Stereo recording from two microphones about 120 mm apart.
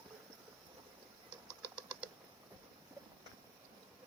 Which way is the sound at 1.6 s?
10° right (ahead or behind).